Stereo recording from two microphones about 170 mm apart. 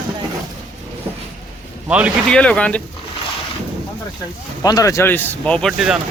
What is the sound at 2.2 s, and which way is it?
Speech, 5° left (ahead or behind).